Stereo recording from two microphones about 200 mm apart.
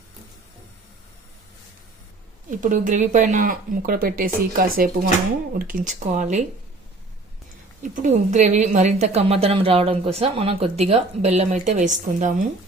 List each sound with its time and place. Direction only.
2.5 s a woman's voice: 40° right (ahead or behind)
7.8 s a woman's voice: 40° right (ahead or behind)